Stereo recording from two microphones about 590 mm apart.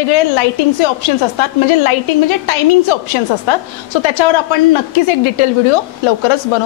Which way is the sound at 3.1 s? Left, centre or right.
Left.